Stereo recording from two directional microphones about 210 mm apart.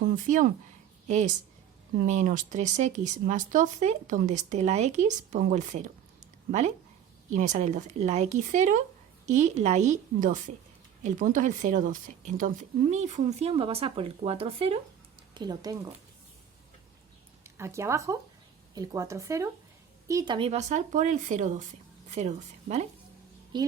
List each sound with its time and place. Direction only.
0.2 s a woman's voice: 40° right (ahead or behind)
7.3 s speech: 35° right (ahead or behind); by 15.9 s 15° right (ahead or behind)
17.4 s speech: 15° right (ahead or behind); by 22.9 s 35° right (ahead or behind)
23.5 s a woman's voice: 20° right (ahead or behind)